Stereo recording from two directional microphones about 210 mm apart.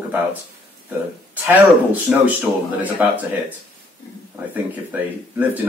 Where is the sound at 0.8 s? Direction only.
10° right (ahead or behind).